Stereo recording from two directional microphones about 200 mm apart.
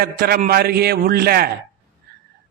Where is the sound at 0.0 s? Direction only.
50° right (ahead or behind).